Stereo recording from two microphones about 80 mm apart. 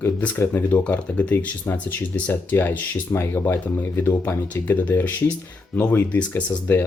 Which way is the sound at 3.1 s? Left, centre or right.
Left.